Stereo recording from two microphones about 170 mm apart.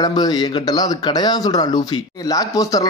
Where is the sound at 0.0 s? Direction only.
25° left (ahead or behind).